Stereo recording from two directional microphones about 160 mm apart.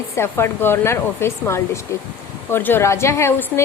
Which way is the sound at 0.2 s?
15° left (ahead or behind).